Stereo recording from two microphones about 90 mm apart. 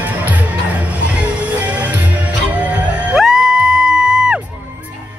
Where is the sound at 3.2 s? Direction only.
5° right (ahead or behind).